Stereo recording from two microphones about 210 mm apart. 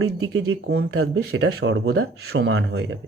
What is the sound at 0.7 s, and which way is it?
Speech, 70° right (ahead or behind).